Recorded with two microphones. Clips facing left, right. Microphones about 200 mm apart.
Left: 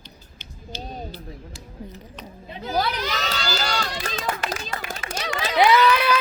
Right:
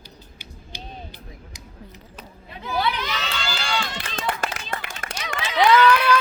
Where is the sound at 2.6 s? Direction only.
40° left (ahead or behind).